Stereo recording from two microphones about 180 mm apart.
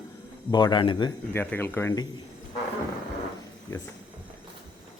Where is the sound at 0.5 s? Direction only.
25° left (ahead or behind).